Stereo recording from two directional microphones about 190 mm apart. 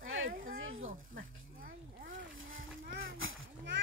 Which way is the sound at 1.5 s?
45° right (ahead or behind).